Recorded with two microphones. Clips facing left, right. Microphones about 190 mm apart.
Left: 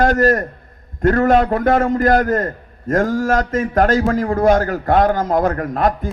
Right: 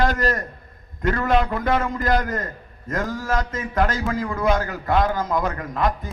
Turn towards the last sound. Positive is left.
turn(degrees=50)  # may be behind; listen again after turning